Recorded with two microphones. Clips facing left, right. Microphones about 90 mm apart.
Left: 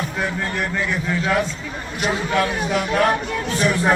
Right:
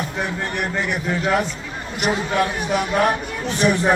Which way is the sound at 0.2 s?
20° right (ahead or behind).